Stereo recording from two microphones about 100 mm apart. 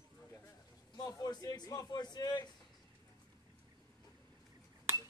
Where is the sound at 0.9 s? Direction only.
40° left (ahead or behind).